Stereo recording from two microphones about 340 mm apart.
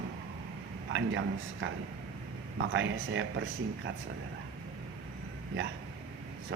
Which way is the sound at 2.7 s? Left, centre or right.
Right.